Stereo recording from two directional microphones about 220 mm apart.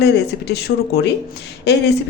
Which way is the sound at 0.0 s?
50° left (ahead or behind).